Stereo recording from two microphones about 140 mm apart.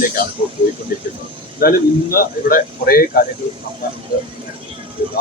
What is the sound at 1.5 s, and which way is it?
Speech, 90° left.